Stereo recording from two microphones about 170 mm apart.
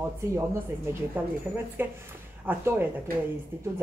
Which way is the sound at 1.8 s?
10° right (ahead or behind).